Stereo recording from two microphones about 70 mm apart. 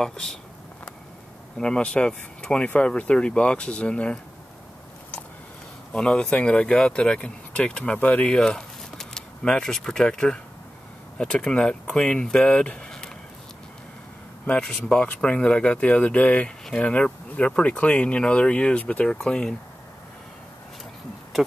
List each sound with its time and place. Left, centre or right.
0.0 s speech: centre
1.6 s speech: centre
5.9 s speech: centre
14.4 s speech: centre